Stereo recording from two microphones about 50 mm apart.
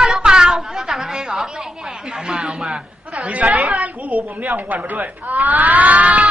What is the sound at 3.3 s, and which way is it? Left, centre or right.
A woman's voice, right.